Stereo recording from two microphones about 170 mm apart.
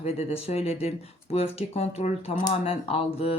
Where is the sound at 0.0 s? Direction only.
40° left (ahead or behind).